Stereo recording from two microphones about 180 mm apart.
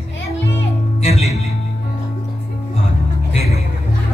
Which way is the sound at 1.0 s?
35° left (ahead or behind).